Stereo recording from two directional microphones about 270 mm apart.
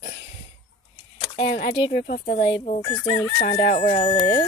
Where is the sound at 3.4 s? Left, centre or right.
Left.